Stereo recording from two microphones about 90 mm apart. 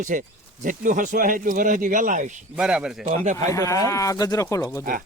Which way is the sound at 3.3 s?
35° left (ahead or behind).